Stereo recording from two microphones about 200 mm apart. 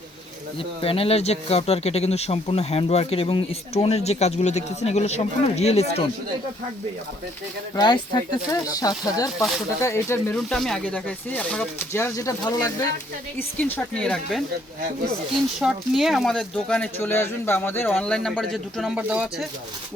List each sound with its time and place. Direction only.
0.8 s speech: 30° left (ahead or behind)
7.8 s speech: 20° left (ahead or behind)
9.4 s speech: centre (ahead or behind)
9.8 s speech: 15° left (ahead or behind)
10.3 s speech: centre (ahead or behind); by 12.7 s 20° left (ahead or behind)
13.6 s speech: 10° left (ahead or behind)
15.6 s speech: centre (ahead or behind)